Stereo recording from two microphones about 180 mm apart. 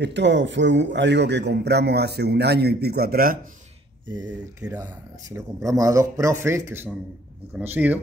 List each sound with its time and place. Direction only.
0.0 s a man's voice: 75° right (ahead or behind); by 3.3 s 55° right (ahead or behind)
5.3 s speech: 20° right (ahead or behind)